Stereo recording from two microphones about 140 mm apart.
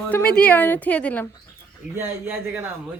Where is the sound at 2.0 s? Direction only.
15° right (ahead or behind).